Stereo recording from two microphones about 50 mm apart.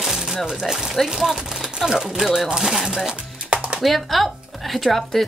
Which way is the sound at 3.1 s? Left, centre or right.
Right.